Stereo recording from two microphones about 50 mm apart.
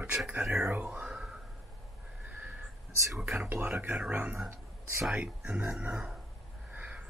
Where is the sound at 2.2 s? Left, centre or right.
Right.